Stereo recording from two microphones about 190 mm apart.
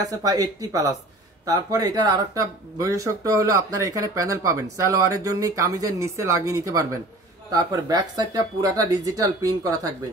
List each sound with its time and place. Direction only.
0.2 s speech: 20° right (ahead or behind)